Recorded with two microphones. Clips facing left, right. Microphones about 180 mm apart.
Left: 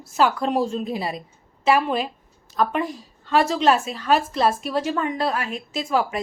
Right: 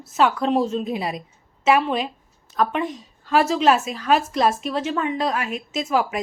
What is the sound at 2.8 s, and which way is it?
Speech, 35° left (ahead or behind).